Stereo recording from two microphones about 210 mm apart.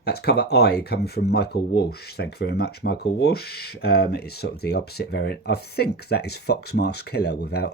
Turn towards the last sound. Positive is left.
turn(degrees=50)  # may be behind; listen again after turning